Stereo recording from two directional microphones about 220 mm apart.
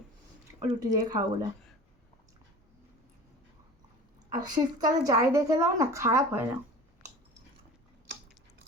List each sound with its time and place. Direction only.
0.8 s a woman's voice: 20° right (ahead or behind)
4.3 s a woman's voice: 15° right (ahead or behind)